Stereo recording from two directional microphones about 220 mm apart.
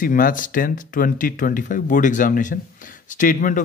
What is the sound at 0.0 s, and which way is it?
Speech, 40° left (ahead or behind).